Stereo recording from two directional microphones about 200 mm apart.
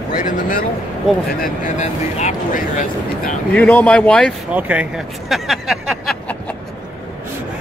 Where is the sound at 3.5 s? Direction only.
5° left (ahead or behind).